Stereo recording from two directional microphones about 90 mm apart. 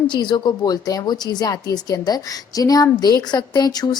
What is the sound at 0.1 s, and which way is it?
A woman's voice, 55° left (ahead or behind).